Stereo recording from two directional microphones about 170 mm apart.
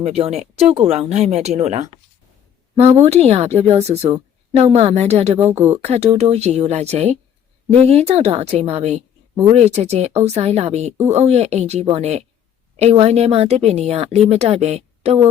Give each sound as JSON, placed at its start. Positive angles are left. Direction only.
{"t": 0.0, "sound": "speech", "side_deg": -35}